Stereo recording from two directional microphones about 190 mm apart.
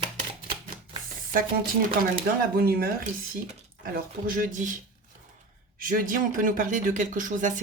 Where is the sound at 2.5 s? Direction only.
55° right (ahead or behind).